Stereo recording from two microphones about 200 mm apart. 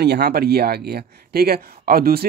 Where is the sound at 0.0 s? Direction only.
55° right (ahead or behind).